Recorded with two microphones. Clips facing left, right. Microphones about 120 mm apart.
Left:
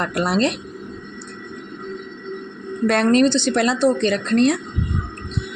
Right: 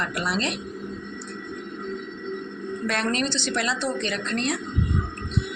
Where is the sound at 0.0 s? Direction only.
40° left (ahead or behind).